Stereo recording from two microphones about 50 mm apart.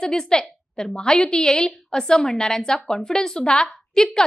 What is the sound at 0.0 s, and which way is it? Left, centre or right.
A woman's voice, centre.